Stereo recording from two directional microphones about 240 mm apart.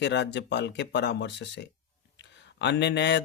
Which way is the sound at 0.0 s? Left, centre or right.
Left.